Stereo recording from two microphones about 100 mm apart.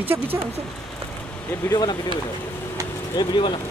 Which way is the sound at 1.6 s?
40° left (ahead or behind).